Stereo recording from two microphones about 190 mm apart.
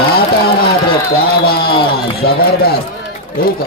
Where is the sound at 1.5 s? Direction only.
55° left (ahead or behind).